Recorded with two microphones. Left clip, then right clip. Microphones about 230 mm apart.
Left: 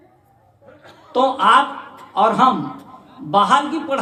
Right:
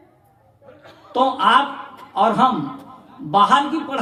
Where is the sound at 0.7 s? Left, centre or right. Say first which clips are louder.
Even; centre.